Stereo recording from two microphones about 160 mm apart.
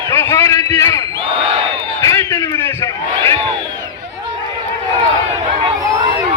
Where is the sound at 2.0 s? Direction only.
20° left (ahead or behind).